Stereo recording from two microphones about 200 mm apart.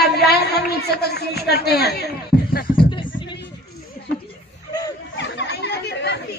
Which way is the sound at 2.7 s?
25° left (ahead or behind).